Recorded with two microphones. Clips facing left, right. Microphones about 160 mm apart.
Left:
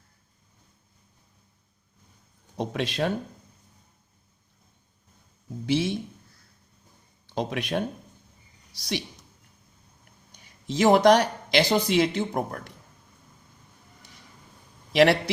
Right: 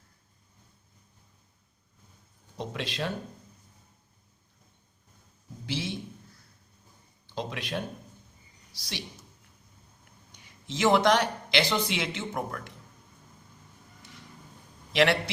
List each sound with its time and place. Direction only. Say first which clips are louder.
2.6 s speech: left 6 dB; 55° left (ahead or behind)
5.6 s a sound: left 9 dB; 55° left (ahead or behind)
7.3 s a sound: left 6 dB; 55° left (ahead or behind)
8.8 s speech: left 9 dB; 55° left (ahead or behind)
10.8 s speech: left 5 dB; 40° left (ahead or behind)
14.9 s speech: left 5 dB; 40° left (ahead or behind)